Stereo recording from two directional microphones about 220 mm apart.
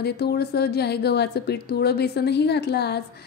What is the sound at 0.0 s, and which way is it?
A woman's voice, 45° left (ahead or behind).